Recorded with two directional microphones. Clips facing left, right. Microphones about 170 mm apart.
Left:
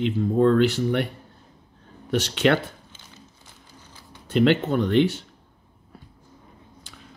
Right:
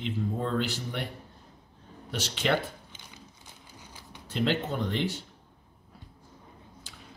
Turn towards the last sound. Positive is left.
turn(degrees=65)  # may be behind; listen again after turning